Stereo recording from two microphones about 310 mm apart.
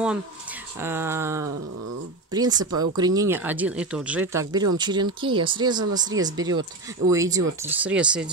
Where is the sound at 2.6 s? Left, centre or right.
Right.